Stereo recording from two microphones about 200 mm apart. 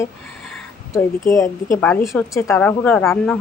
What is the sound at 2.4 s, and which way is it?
Speech, 15° left (ahead or behind).